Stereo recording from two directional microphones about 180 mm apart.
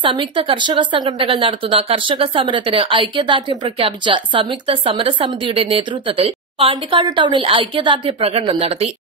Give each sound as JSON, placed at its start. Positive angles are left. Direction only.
{"t": 0.0, "sound": "speech", "side_deg": -25}